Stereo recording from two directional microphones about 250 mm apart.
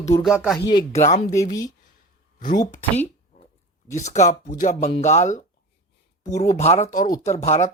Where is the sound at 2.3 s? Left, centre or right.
Left.